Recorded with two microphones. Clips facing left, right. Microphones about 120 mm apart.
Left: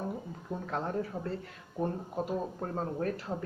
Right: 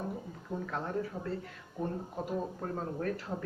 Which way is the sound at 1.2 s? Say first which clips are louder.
Left 2 dB; 15° left (ahead or behind).